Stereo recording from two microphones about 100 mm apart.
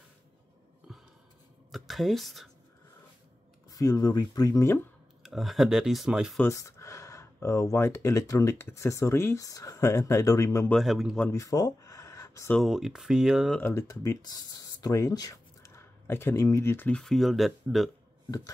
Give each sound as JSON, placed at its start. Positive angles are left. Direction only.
{"t": 1.7, "sound": "a sound", "side_deg": 0}
{"t": 3.7, "sound": "speech", "side_deg": 35}
{"t": 5.2, "sound": "speech", "side_deg": 0}
{"t": 6.4, "sound": "speech", "side_deg": 30}
{"t": 10.7, "sound": "speech", "side_deg": 0}
{"t": 11.3, "sound": "a sound", "side_deg": 35}
{"t": 12.5, "sound": "speech", "side_deg": -5}
{"t": 13.6, "sound": "speech", "side_deg": 25}
{"t": 16.9, "sound": "speech", "side_deg": 0}